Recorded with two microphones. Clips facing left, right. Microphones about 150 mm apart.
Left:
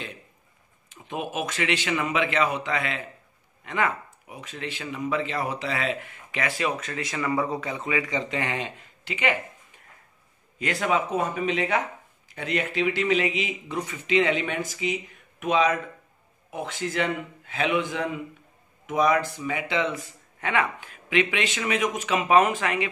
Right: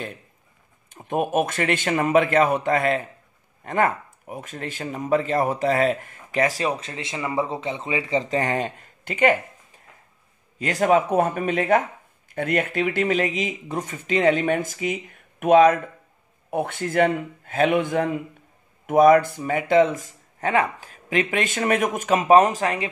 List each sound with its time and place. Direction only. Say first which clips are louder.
0.8 s speech: right 8 dB; 50° right (ahead or behind)